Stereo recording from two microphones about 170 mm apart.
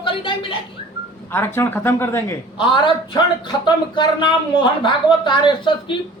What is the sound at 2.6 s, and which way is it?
Speech, 30° left (ahead or behind).